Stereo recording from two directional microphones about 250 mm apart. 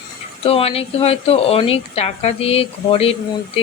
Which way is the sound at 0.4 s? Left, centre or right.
Left.